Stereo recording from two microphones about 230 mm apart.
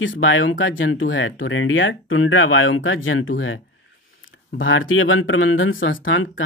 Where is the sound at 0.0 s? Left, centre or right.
Left.